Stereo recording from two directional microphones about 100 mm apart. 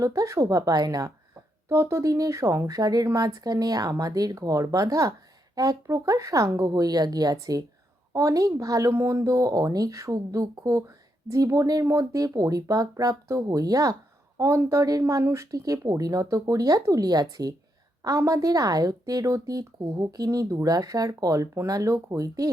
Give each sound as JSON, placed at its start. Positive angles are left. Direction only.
{"t": 0.0, "sound": "speech", "side_deg": -30}
{"t": 1.7, "sound": "speech", "side_deg": -25}